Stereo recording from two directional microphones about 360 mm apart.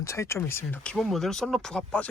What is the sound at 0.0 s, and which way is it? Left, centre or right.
Speech, centre.